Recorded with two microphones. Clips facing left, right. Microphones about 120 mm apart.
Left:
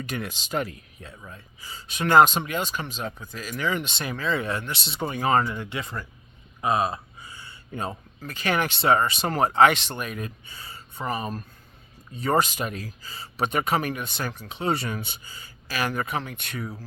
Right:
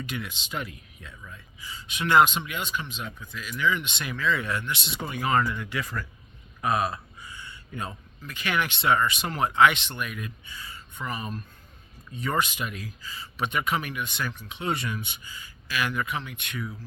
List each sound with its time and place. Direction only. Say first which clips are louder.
0.0 s speech: left 3 dB; 40° left (ahead or behind); by 6.1 s 25° left (ahead or behind)
6.6 s a sound: left 2 dB; 25° left (ahead or behind)
8.3 s speech: left 3 dB; 35° left (ahead or behind)